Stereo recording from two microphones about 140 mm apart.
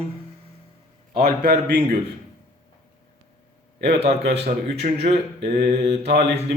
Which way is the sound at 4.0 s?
45° right (ahead or behind).